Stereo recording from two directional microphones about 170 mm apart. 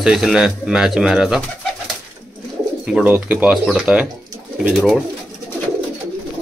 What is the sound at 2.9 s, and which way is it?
Speech, 10° right (ahead or behind).